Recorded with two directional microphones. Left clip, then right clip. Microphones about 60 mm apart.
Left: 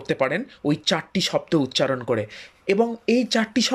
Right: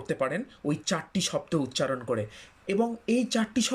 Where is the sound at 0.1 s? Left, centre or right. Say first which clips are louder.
Left 7 dB; right.